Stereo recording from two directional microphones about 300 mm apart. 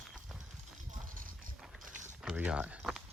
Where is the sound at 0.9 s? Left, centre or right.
Right.